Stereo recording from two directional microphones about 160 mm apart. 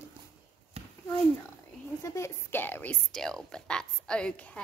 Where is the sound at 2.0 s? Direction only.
20° left (ahead or behind).